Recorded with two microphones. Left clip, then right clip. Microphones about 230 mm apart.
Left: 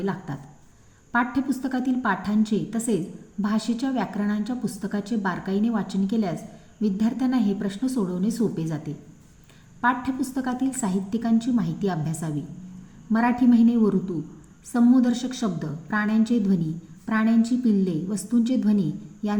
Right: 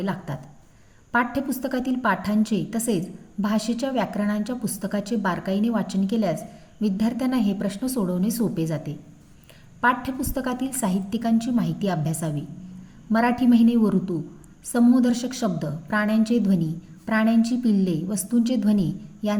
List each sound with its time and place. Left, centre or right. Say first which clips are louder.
0.0 s a woman's voice: even; right
9.8 s a woman's voice: right 2 dB; right
14.7 s a woman's voice: right 1 dB; right